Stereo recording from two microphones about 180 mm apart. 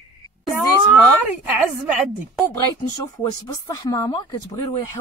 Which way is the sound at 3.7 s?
20° left (ahead or behind).